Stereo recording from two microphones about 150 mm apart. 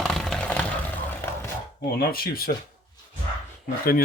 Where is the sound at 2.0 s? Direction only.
80° left.